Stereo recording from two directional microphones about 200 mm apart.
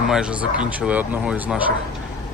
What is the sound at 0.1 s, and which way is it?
Speech, 5° right (ahead or behind).